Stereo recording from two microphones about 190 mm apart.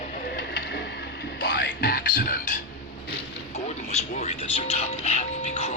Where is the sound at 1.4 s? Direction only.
55° left (ahead or behind).